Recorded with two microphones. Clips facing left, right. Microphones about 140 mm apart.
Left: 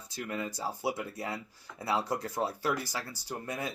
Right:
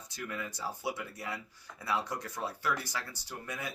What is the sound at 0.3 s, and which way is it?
Speech, 30° left (ahead or behind).